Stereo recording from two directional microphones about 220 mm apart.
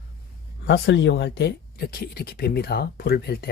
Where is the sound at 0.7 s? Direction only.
55° left (ahead or behind).